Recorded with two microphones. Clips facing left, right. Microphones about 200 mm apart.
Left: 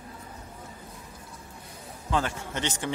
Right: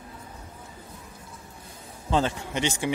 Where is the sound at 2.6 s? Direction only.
10° right (ahead or behind).